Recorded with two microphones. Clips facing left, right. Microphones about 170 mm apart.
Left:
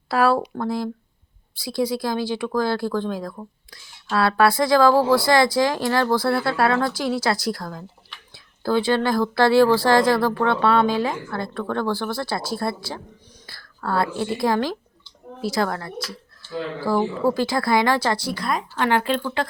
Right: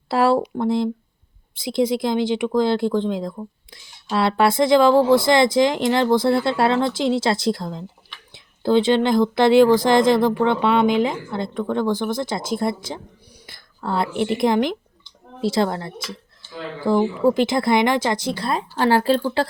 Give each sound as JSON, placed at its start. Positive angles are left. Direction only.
{"t": 0.1, "sound": "speech", "side_deg": -25}